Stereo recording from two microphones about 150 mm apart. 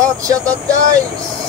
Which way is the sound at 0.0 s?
25° right (ahead or behind).